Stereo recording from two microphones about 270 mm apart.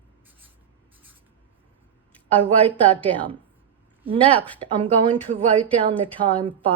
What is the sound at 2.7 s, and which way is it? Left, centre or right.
Speech, centre.